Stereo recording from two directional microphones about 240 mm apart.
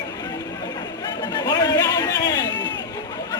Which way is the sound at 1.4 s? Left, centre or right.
Centre.